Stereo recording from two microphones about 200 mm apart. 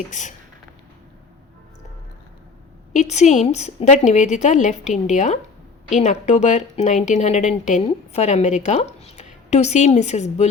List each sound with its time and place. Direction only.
0.1 s a woman's voice: 40° left (ahead or behind)
2.9 s a woman's voice: 35° left (ahead or behind)